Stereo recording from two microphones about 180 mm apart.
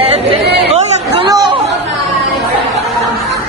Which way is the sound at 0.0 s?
30° right (ahead or behind).